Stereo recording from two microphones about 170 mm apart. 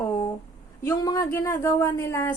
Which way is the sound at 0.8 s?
20° left (ahead or behind).